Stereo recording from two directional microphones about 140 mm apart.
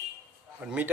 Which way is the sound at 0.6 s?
15° right (ahead or behind).